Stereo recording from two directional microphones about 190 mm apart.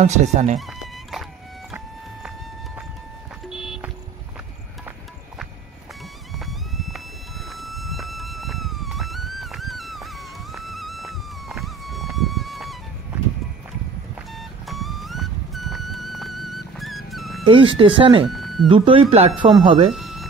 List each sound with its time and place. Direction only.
0.0 s speech: 35° right (ahead or behind)
0.6 s music: centre (ahead or behind)
3.4 s vehicle: 5° right (ahead or behind)
6.3 s music: centre (ahead or behind)
14.3 s music: centre (ahead or behind)
17.5 s speech: 25° right (ahead or behind)
18.3 s a sound: centre (ahead or behind)
18.7 s speech: 25° right (ahead or behind)
19.9 s music: centre (ahead or behind)